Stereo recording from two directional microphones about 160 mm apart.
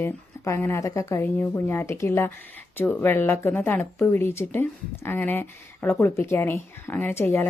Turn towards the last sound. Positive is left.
turn(degrees=15)  # may be behind; listen again after turning